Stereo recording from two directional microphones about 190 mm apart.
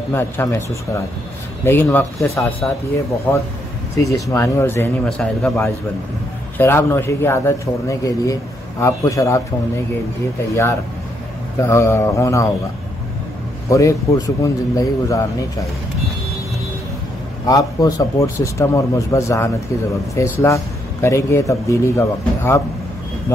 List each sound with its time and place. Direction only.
0.1 s a man's voice: 10° left (ahead or behind)
10.5 s a man's voice: 15° left (ahead or behind)
13.7 s a man's voice: 15° left (ahead or behind)
17.5 s a man's voice: 20° left (ahead or behind)